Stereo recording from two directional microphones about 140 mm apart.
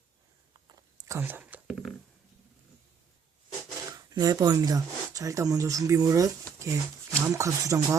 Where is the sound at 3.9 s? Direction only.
25° right (ahead or behind).